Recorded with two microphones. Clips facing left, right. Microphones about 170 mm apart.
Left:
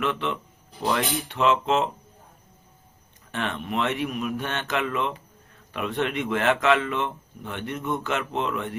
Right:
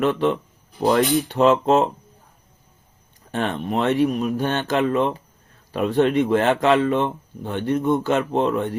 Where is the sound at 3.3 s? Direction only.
35° right (ahead or behind).